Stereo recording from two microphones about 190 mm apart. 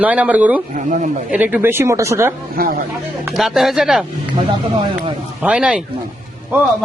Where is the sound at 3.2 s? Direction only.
Centre (ahead or behind).